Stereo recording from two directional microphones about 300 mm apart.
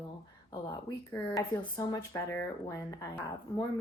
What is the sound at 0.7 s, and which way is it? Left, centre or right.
Speech, centre.